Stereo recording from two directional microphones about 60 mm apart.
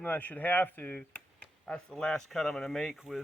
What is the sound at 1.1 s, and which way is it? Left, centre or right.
Speech, centre.